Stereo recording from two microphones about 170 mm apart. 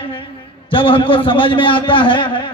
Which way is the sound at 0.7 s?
30° left (ahead or behind).